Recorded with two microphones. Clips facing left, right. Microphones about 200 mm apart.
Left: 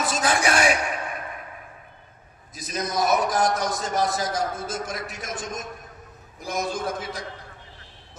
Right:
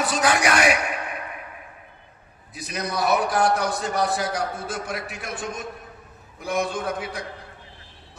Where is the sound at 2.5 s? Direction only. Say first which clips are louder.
Left 1 dB; 65° right (ahead or behind).